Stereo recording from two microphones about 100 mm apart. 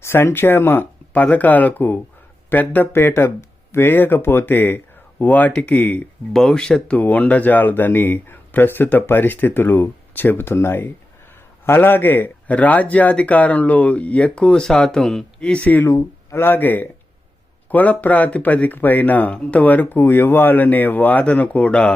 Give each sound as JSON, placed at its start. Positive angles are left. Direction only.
{"t": 0.0, "sound": "speech", "side_deg": 25}